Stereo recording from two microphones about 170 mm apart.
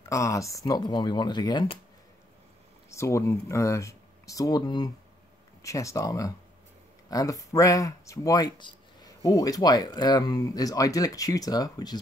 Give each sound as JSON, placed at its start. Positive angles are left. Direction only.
{"t": 0.1, "sound": "speech", "side_deg": 20}
{"t": 2.9, "sound": "speech", "side_deg": 15}